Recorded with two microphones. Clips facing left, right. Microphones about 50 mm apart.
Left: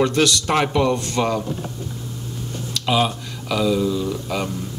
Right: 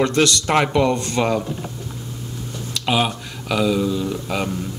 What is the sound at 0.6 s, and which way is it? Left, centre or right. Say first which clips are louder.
Speech: right 2 dB; centre.